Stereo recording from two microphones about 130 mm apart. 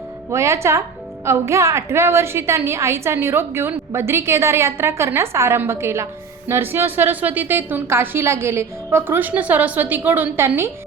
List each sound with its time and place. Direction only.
0.3 s a woman's voice: 20° right (ahead or behind)